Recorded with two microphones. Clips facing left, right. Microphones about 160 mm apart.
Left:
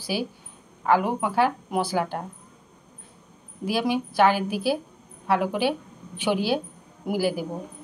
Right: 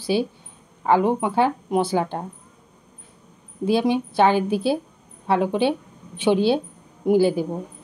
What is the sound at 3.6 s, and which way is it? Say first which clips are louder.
A woman's voice: right 5 dB; 25° right (ahead or behind).